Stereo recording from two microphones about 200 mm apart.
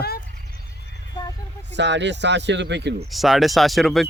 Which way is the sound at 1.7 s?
60° right (ahead or behind).